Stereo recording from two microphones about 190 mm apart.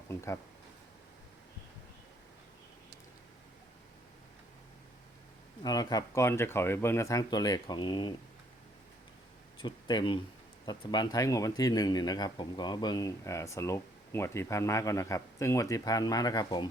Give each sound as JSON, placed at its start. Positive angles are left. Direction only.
{"t": 5.6, "sound": "speech", "side_deg": 20}
{"t": 9.6, "sound": "speech", "side_deg": 25}